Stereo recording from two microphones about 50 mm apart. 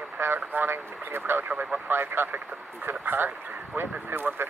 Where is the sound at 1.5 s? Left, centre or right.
Right.